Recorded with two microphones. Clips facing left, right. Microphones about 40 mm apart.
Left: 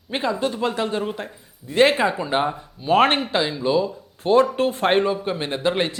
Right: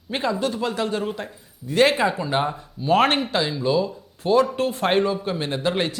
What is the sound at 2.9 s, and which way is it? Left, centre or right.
Speech, left.